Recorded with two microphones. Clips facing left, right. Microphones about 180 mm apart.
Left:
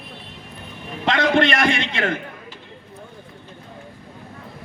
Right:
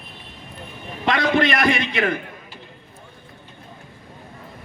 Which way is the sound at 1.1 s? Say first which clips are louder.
Left 1 dB; 25° left (ahead or behind).